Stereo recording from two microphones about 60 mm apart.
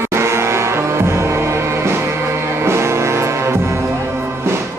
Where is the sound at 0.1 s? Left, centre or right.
Right.